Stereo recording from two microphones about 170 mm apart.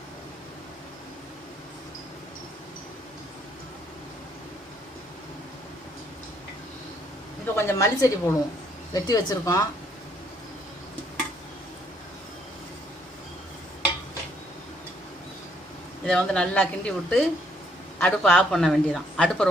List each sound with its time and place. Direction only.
7.5 s a woman's voice: 15° left (ahead or behind)
16.0 s speech: 5° left (ahead or behind)